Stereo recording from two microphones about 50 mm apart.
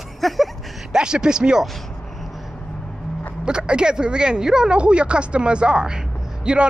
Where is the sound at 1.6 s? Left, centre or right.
Centre.